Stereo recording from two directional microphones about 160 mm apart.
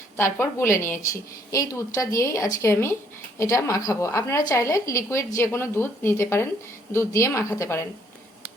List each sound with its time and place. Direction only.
0.3 s a woman's voice: 15° left (ahead or behind)